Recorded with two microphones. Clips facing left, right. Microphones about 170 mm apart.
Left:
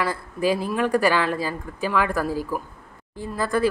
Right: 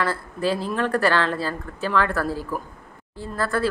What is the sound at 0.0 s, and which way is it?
A woman's voice, 15° left (ahead or behind).